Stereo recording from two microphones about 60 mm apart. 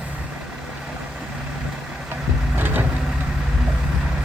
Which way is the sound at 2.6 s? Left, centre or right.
Right.